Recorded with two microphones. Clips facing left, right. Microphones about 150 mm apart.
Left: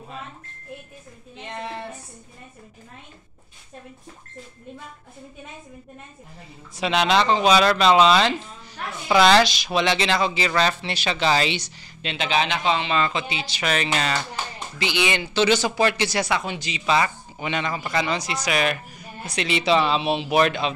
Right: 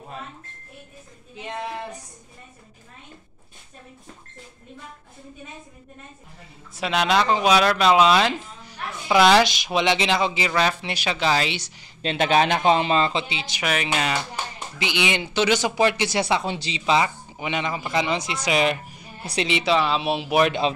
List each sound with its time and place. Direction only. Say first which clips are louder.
1.4 s speech: right 2 dB; 15° right (ahead or behind)
6.8 s speech: left 1 dB; 5° right (ahead or behind)
12.0 s speech: right 4 dB; 45° right (ahead or behind); by 13.6 s 25° right (ahead or behind)
13.6 s speech: even; 10° right (ahead or behind); by 19.5 s 30° right (ahead or behind)
19.6 s speech: left 3 dB; 5° right (ahead or behind)